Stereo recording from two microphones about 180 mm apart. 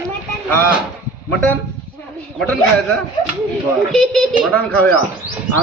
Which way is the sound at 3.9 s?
5° left (ahead or behind).